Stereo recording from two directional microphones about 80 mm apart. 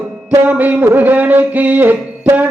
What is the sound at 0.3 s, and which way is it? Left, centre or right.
Music, right.